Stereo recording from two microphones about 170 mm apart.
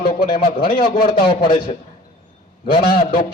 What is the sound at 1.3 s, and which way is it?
Speech, 30° left (ahead or behind).